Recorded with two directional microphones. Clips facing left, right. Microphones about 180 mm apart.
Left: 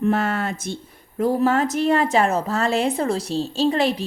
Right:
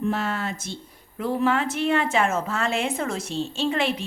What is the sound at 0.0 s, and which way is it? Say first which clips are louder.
Speech: left 5 dB; 55° left (ahead or behind).